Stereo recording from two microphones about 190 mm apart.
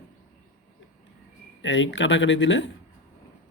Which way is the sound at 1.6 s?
80° left.